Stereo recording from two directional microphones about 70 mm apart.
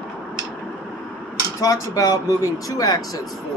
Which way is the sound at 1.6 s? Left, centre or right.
Left.